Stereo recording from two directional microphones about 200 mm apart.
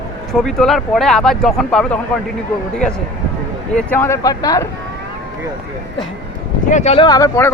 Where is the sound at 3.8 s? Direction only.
10° left (ahead or behind).